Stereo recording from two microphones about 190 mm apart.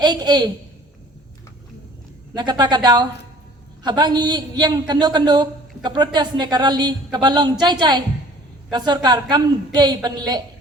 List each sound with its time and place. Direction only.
0.0 s a man's voice: 20° right (ahead or behind)
2.3 s a man's voice: 25° right (ahead or behind)